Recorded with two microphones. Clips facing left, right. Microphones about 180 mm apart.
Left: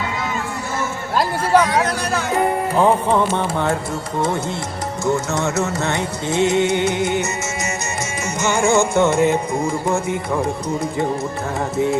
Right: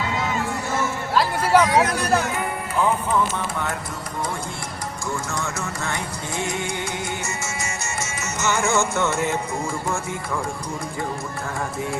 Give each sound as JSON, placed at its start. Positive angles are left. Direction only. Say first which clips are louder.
{"t": 2.3, "sound": "music", "louder": "left 8 dB", "side_deg": 40}
{"t": 5.3, "sound": "music", "louder": "left 8 dB", "side_deg": 25}
{"t": 8.4, "sound": "music", "louder": "left 5 dB", "side_deg": 15}